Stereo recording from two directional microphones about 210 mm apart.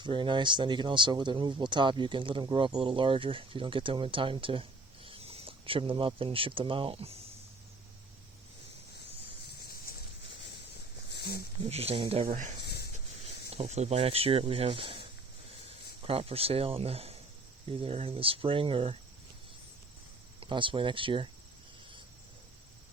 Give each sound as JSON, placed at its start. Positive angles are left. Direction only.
{"t": 0.0, "sound": "speech", "side_deg": -20}
{"t": 11.1, "sound": "a sound", "side_deg": 50}
{"t": 11.7, "sound": "speech", "side_deg": -30}
{"t": 12.6, "sound": "a sound", "side_deg": 50}
{"t": 13.5, "sound": "speech", "side_deg": -30}
{"t": 16.0, "sound": "speech", "side_deg": -30}
{"t": 20.4, "sound": "speech", "side_deg": -25}